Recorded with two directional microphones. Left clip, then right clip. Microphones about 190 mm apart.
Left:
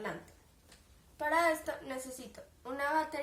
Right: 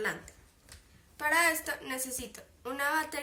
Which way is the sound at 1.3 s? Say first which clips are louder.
Right 2 dB; 20° left (ahead or behind).